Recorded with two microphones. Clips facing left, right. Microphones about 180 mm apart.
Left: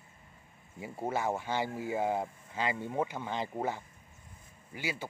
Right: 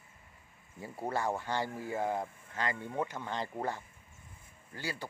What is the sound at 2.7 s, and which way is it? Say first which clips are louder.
Speech: left 3 dB; 25° left (ahead or behind).